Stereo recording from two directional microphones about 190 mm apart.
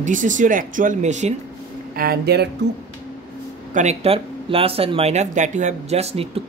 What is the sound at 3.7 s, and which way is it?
Speech, 35° right (ahead or behind).